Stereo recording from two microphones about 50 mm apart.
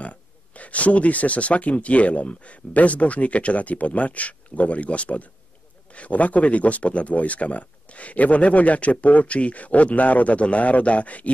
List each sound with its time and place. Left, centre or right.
0.6 s speech: left